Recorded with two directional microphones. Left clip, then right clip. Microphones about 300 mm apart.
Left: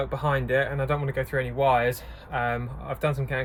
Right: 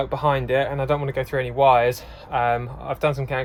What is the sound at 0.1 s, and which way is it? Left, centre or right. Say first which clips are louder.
Speech: right 4 dB; right.